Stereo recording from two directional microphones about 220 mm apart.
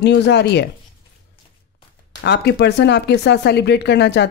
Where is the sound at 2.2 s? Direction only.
50° left (ahead or behind).